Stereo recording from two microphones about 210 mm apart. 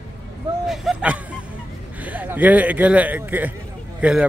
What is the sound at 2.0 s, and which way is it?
A man's voice, 5° right (ahead or behind).